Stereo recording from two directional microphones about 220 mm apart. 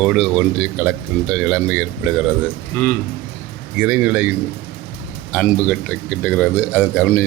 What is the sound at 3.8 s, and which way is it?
Speech, 5° right (ahead or behind).